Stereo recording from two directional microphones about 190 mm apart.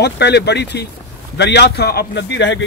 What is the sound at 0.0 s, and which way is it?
A man's voice, 60° left (ahead or behind).